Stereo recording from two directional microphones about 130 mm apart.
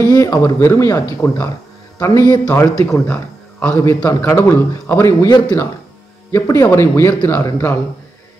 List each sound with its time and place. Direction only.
0.1 s a man's voice: 25° left (ahead or behind)